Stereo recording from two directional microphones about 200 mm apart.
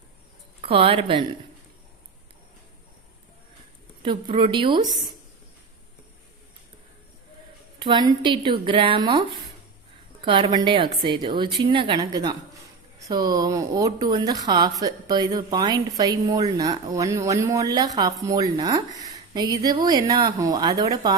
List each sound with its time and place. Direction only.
0.6 s speech: 25° right (ahead or behind)
4.0 s a woman's voice: 25° right (ahead or behind)
7.8 s a woman's voice: 20° right (ahead or behind)